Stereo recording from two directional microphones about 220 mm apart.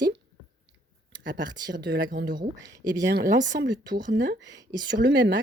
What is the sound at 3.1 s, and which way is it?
Speech, 50° right (ahead or behind).